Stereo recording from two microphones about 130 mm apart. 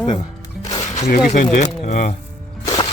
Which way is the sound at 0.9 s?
60° left (ahead or behind).